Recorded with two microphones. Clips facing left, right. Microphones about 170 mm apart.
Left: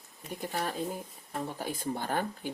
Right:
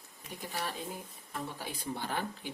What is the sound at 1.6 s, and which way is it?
Speech, 45° left (ahead or behind).